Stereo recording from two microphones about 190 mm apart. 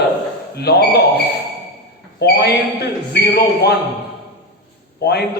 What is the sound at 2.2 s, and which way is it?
A man's voice, 60° left (ahead or behind).